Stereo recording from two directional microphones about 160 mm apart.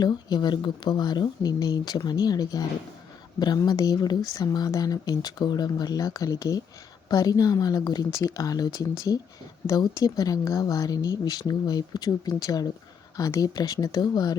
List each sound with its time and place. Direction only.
0.0 s speech: 25° left (ahead or behind)